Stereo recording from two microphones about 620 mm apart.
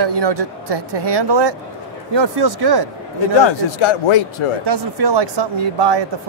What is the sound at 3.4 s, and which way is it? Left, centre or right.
Speech, left.